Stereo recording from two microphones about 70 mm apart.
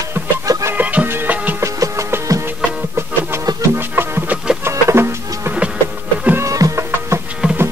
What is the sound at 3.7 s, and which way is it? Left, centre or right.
Music, right.